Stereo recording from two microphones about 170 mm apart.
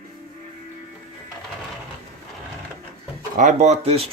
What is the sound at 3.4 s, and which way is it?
Speech, 45° right (ahead or behind).